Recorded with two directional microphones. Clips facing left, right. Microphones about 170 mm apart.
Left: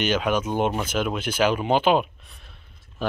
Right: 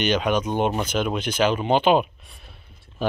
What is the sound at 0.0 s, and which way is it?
Speech, 5° left (ahead or behind).